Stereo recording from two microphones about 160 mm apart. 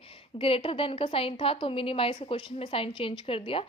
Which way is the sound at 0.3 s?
35° left (ahead or behind).